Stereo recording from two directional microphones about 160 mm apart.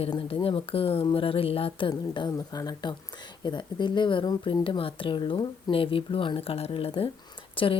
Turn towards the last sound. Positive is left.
turn(degrees=35)  # may be behind; listen again after turning